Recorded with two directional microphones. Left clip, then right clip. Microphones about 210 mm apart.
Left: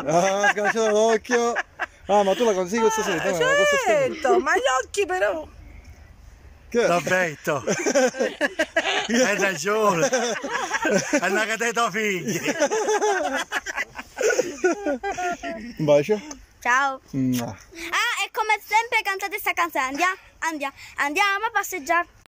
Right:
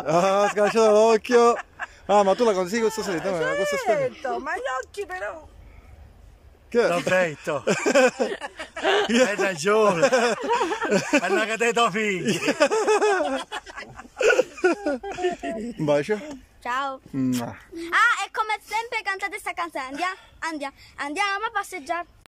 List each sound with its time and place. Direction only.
0.0 s a woman's voice: 5° right (ahead or behind)
5.1 s speech: 20° left (ahead or behind)
6.7 s a woman's voice: 5° right (ahead or behind)
8.4 s a sound: 40° left (ahead or behind)
8.8 s a sound: 40° right (ahead or behind)
9.1 s a woman's voice: 5° right (ahead or behind)
10.4 s a sound: 40° right (ahead or behind)
10.9 s a woman's voice: 5° right (ahead or behind)
18.0 s a woman's voice: 10° left (ahead or behind)